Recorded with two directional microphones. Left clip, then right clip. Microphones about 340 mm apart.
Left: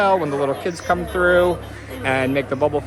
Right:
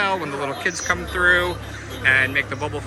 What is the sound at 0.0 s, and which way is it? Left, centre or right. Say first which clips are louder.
Speech: left 5 dB; centre.